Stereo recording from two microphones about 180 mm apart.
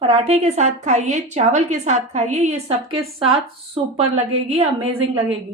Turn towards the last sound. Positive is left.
turn(degrees=-30)  # may be behind; listen again after turning